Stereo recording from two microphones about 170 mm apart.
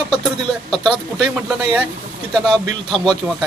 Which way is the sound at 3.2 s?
10° right (ahead or behind).